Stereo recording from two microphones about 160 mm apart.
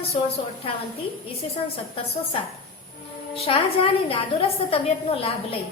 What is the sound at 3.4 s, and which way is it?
A woman's voice, 35° left (ahead or behind).